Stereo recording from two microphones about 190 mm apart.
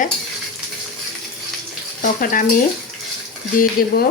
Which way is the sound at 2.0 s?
45° left (ahead or behind).